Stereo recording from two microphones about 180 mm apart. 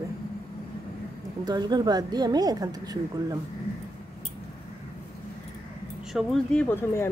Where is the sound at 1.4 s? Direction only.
20° right (ahead or behind).